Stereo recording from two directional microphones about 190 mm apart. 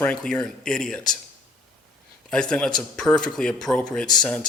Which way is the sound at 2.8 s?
5° left (ahead or behind).